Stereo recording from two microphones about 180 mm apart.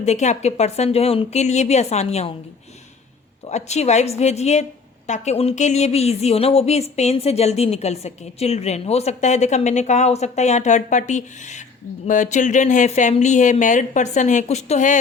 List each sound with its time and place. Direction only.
0.0 s speech: 40° left (ahead or behind)
3.4 s speech: 40° left (ahead or behind)